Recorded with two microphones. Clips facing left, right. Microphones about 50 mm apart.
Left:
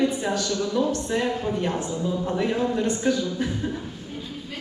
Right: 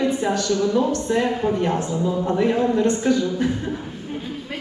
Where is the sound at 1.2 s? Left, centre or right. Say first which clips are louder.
Right 4 dB; right.